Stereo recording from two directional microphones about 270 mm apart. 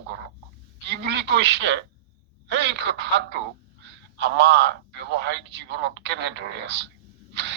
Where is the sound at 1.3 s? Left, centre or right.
Right.